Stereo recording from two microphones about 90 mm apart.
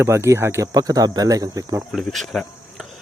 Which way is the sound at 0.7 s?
45° right (ahead or behind).